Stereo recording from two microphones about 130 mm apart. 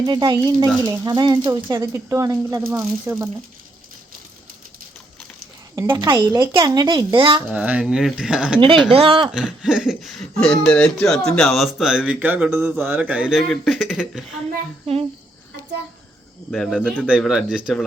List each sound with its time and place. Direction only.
0.0 s speech: 35° right (ahead or behind)
5.7 s speech: 25° right (ahead or behind)
6.6 s a woman's voice: 35° right (ahead or behind)
7.5 s speech: 10° right (ahead or behind)
8.9 s speech: 45° right (ahead or behind)
9.3 s speech: 5° right (ahead or behind)
16.5 s speech: centre (ahead or behind)